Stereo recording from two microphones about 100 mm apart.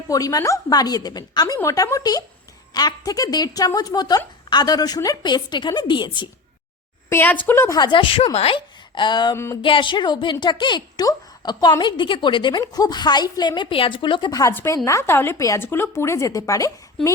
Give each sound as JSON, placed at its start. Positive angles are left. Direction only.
{"t": 0.1, "sound": "a woman's voice", "side_deg": 35}
{"t": 7.1, "sound": "speech", "side_deg": 20}
{"t": 7.7, "sound": "a woman's voice", "side_deg": 50}
{"t": 9.3, "sound": "speech", "side_deg": 25}
{"t": 9.6, "sound": "a woman's voice", "side_deg": 55}
{"t": 14.5, "sound": "a woman's voice", "side_deg": 30}